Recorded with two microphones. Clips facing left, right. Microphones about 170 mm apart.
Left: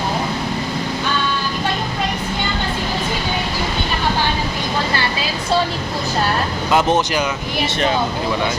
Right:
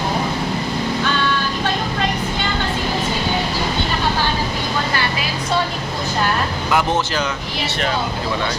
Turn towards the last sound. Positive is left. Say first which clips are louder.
# left 3 dB
turn(degrees=15)  # may be behind; listen again after turning